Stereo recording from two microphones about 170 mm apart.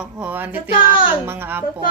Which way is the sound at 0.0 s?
10° right (ahead or behind).